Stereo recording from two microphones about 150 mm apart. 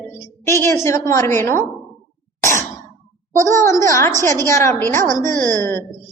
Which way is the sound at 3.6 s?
20° left (ahead or behind).